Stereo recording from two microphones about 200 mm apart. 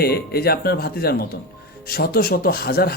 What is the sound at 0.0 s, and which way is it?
Speech, 50° left (ahead or behind).